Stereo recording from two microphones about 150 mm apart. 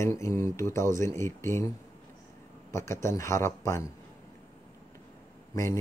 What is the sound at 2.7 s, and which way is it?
Speech, 20° left (ahead or behind).